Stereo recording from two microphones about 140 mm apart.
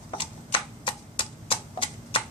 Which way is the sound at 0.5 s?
40° left (ahead or behind).